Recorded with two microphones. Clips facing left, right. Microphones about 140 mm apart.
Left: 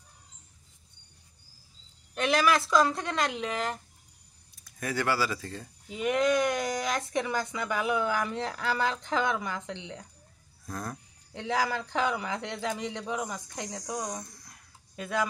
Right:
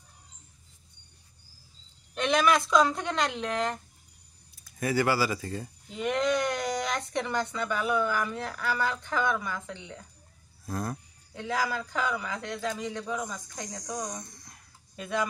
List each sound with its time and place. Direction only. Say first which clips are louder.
2.1 s speech: right 1 dB; 5° left (ahead or behind)
4.6 s speech: right 3 dB; 5° right (ahead or behind)
5.9 s speech: left 2 dB; 5° left (ahead or behind); by 9.8 s 20° left (ahead or behind)
10.6 s a sound: right 4 dB; 5° right (ahead or behind)
11.4 s a man's voice: left 1 dB; 25° left (ahead or behind)
13.6 s speech: left 1 dB; centre (ahead or behind)